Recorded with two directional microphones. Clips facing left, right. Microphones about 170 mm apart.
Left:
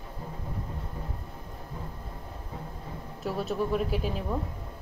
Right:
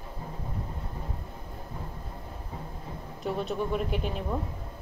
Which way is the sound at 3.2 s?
5° left (ahead or behind).